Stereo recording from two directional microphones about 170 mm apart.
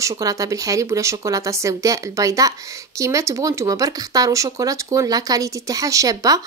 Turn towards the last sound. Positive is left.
turn(degrees=-20)  # may be behind; listen again after turning